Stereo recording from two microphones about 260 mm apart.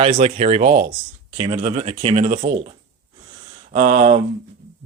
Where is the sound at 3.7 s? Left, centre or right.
Right.